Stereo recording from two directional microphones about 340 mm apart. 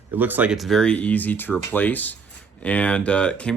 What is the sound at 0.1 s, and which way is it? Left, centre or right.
Speech, centre.